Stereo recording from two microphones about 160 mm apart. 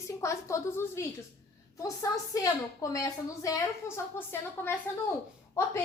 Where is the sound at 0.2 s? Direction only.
20° left (ahead or behind).